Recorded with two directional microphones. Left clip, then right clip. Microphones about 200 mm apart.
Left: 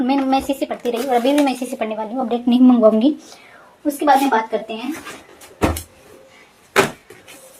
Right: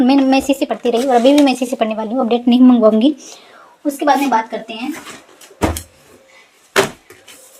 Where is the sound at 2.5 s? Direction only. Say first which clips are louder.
Right 1 dB; 25° right (ahead or behind).